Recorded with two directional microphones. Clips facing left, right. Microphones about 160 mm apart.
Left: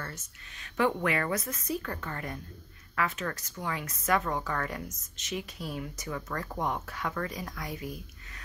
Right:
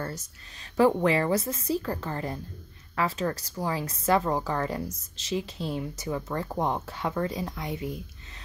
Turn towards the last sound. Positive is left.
turn(degrees=-25)  # may be behind; listen again after turning